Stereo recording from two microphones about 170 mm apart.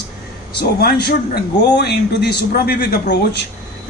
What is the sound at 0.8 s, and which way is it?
A man's voice, 65° left (ahead or behind).